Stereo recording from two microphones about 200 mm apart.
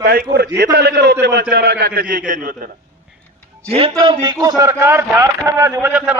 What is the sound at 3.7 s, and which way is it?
A man's voice, 30° right (ahead or behind).